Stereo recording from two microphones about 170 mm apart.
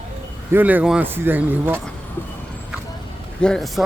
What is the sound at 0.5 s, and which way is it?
Speech, 10° right (ahead or behind).